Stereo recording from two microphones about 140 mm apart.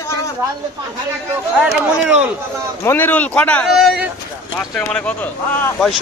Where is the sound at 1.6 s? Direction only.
5° right (ahead or behind).